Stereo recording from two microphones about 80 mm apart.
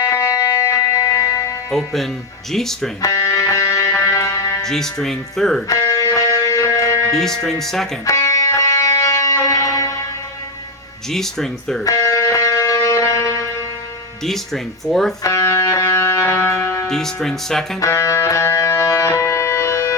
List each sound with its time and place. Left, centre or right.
0.0 s music: left
1.7 s speech: centre
3.0 s music: left
4.6 s speech: centre
5.6 s music: left
7.1 s speech: centre
8.0 s music: left
11.1 s speech: centre
11.8 s music: left
14.3 s speech: centre
15.2 s music: left
16.9 s speech: centre
17.7 s music: left